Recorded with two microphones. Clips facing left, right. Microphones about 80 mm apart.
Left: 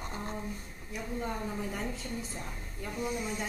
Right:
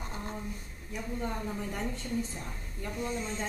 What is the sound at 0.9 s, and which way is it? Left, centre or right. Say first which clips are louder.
A woman's voice: even; centre.